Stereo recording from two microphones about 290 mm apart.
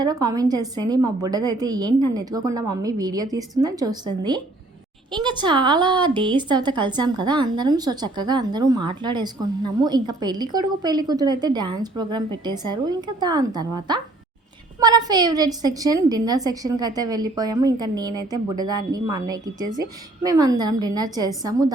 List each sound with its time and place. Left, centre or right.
0.0 s a woman's voice: centre